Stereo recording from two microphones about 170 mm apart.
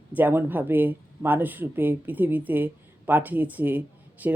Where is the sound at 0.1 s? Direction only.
10° right (ahead or behind).